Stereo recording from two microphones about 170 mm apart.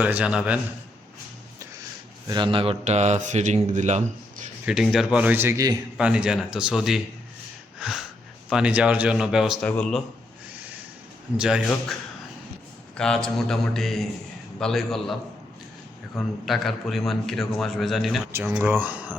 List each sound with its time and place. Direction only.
0.0 s a man's voice: 10° right (ahead or behind)
2.3 s speech: 30° right (ahead or behind); by 4.4 s 45° right (ahead or behind)
4.6 s a man's voice: centre (ahead or behind)
6.0 s a man's voice: 5° right (ahead or behind)
7.8 s a sound: 5° right (ahead or behind)
8.4 s a man's voice: 5° right (ahead or behind)
11.3 s a man's voice: 5° right (ahead or behind)
13.0 s a man's voice: 5° left (ahead or behind)
18.3 s a man's voice: 10° right (ahead or behind)